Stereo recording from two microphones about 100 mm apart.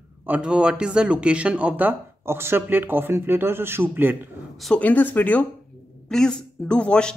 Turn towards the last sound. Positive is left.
turn(degrees=10)  # may be behind; listen again after turning